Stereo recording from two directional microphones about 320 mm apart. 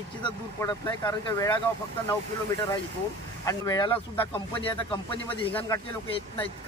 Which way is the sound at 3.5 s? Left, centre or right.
Centre.